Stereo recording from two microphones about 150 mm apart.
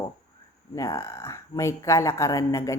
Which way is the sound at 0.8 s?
20° left (ahead or behind).